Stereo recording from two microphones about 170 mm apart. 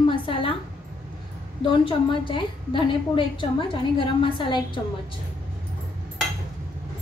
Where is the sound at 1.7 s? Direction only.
30° left (ahead or behind).